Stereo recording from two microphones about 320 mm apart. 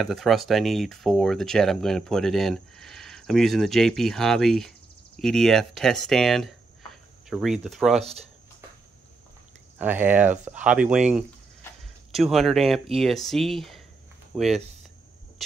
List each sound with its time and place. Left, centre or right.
0.0 s speech: centre
9.8 s speech: centre